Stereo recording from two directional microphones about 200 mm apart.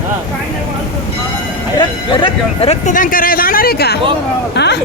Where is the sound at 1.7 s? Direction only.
25° left (ahead or behind); by 4.8 s 60° left (ahead or behind).